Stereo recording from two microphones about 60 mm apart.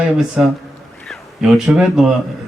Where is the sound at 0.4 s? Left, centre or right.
Centre.